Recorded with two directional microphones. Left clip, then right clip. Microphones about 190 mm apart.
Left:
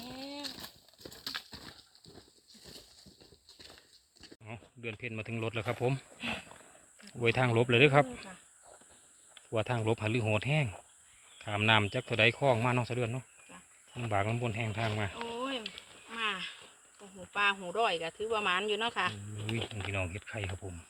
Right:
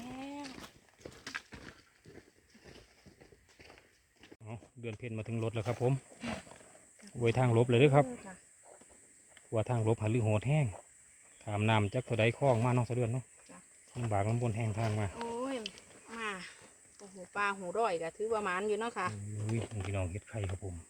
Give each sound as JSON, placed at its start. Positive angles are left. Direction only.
{"t": 0.0, "sound": "a sound", "side_deg": 25}
{"t": 1.0, "sound": "horse", "side_deg": 45}
{"t": 4.4, "sound": "speech", "side_deg": -10}
{"t": 6.1, "sound": "a sound", "side_deg": 5}
{"t": 7.0, "sound": "speech", "side_deg": -15}
{"t": 9.5, "sound": "speech", "side_deg": -10}
{"t": 15.1, "sound": "a sound", "side_deg": -15}
{"t": 16.1, "sound": "wild animals", "side_deg": -15}
{"t": 17.3, "sound": "snake", "side_deg": -15}
{"t": 17.6, "sound": "speech", "side_deg": -10}